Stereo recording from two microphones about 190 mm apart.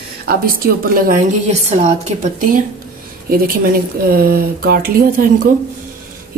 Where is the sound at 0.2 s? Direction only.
50° right (ahead or behind).